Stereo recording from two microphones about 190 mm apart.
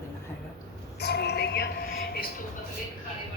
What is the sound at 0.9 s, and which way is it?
Music, 60° left (ahead or behind).